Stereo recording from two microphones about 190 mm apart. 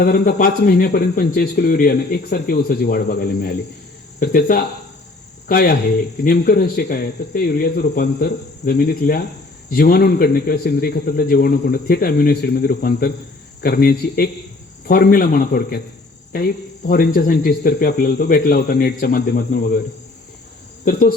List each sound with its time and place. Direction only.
0.0 s cricket: 50° left (ahead or behind)